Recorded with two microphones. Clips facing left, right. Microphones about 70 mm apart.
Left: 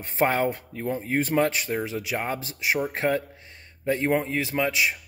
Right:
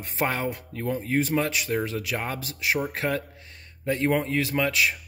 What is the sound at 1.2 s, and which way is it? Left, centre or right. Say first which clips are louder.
Speech: left 3 dB; left.